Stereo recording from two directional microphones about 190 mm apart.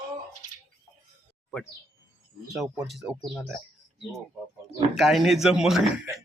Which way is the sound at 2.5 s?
Centre (ahead or behind).